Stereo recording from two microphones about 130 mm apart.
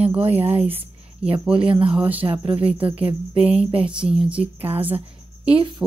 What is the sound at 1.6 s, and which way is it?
Speech, 45° right (ahead or behind).